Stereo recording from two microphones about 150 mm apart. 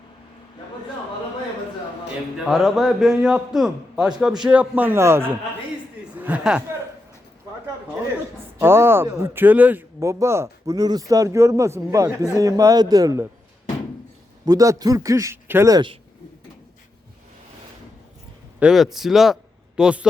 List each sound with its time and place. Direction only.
2.5 s a man's voice: centre (ahead or behind)
8.5 s speech: 15° right (ahead or behind)
14.4 s speech: 25° right (ahead or behind)
18.6 s a man's voice: centre (ahead or behind)